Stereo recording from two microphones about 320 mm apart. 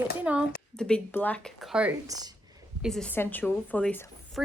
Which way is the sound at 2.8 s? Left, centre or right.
Centre.